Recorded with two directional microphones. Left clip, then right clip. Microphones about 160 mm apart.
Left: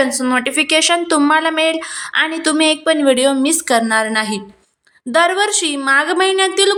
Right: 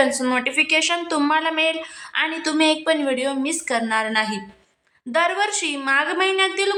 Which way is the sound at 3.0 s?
40° left (ahead or behind).